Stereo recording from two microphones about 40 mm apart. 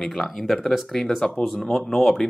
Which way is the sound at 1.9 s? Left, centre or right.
Centre.